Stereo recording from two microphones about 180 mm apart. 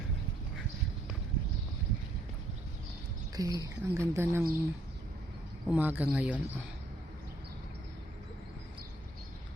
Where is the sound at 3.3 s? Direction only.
20° right (ahead or behind).